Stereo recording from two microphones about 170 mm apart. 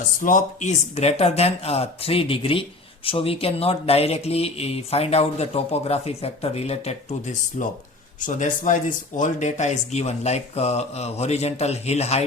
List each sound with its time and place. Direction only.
0.2 s speech: 50° left (ahead or behind)
7.6 s speech: 50° left (ahead or behind)